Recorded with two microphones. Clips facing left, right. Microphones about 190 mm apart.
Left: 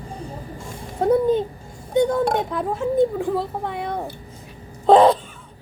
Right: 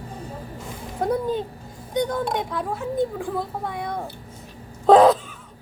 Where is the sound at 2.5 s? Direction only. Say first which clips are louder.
Left 5 dB; 25° left (ahead or behind).